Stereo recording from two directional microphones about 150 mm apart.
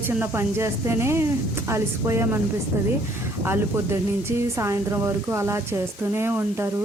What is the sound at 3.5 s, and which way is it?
Speech, 15° right (ahead or behind).